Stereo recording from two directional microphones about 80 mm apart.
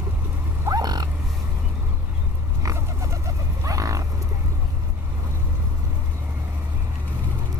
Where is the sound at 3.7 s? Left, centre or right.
Right.